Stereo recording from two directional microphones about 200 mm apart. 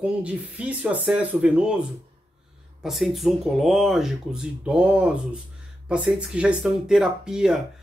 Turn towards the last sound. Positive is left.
turn(degrees=-5)  # may be behind; listen again after turning